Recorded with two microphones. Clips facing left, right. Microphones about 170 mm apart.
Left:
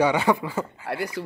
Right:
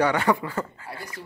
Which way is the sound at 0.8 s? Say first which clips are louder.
Left 10 dB; 75° left (ahead or behind).